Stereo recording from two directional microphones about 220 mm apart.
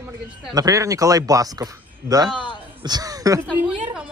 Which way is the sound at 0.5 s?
15° right (ahead or behind).